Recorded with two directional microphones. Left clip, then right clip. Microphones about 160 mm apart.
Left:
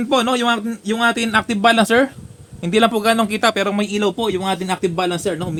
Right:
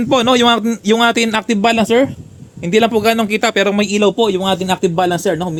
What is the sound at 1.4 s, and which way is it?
Speech, 20° right (ahead or behind).